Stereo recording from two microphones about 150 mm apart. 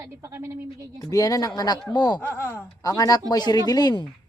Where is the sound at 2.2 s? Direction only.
15° left (ahead or behind).